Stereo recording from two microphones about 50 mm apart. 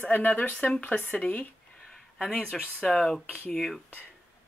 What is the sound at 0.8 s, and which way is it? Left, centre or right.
Speech, left.